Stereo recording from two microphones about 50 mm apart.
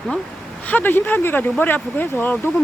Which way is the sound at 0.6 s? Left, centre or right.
Left.